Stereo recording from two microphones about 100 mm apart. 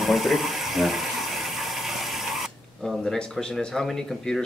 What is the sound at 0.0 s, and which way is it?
Water, centre (ahead or behind).